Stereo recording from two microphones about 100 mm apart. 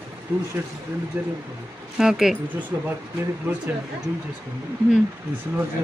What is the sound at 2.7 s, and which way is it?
Speech, 25° right (ahead or behind).